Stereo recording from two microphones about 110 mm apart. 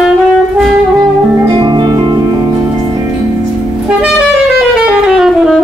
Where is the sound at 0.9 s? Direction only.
35° right (ahead or behind).